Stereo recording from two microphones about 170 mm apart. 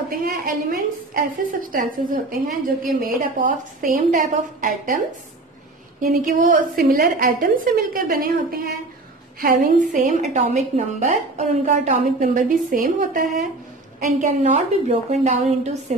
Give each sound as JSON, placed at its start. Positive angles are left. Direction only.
{"t": 0.1, "sound": "a woman's voice", "side_deg": -60}
{"t": 6.0, "sound": "a woman's voice", "side_deg": -60}